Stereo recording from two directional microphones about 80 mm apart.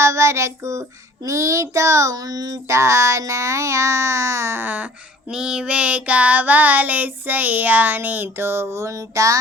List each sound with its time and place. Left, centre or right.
0.0 s child singing: right
5.3 s child singing: centre; by 9.4 s right